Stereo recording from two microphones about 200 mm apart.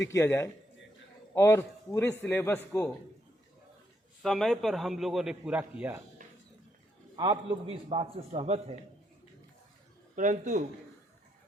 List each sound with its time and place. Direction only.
0.1 s a man's voice: 15° left (ahead or behind)
4.2 s a man's voice: centre (ahead or behind)
6.2 s a sound: 40° right (ahead or behind)
7.2 s a man's voice: 25° right (ahead or behind)
10.2 s a man's voice: 40° right (ahead or behind)